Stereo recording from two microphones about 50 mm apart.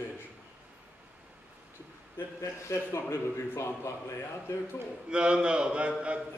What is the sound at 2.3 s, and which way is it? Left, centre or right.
A man's voice, left.